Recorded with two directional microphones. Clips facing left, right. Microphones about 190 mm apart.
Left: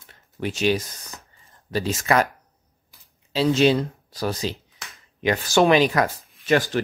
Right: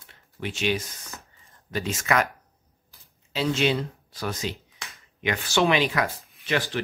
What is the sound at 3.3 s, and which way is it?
Speech, 35° left (ahead or behind).